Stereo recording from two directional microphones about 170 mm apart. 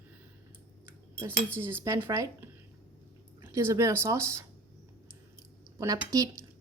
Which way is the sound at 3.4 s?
15° right (ahead or behind).